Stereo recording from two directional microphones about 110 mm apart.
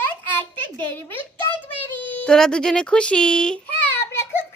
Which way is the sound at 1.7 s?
15° left (ahead or behind).